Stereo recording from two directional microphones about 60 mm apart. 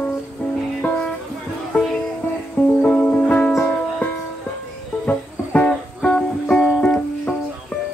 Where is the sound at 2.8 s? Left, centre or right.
Centre.